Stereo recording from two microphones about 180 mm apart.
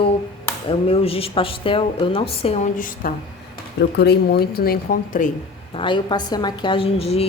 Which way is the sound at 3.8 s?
65° left (ahead or behind).